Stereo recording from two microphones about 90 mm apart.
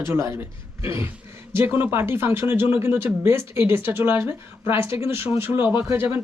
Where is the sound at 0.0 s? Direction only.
30° right (ahead or behind).